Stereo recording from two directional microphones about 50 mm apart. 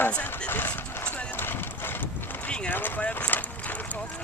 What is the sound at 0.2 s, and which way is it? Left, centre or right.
Vehicle, left.